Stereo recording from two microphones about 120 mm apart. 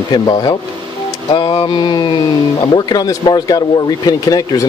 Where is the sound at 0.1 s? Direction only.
35° left (ahead or behind).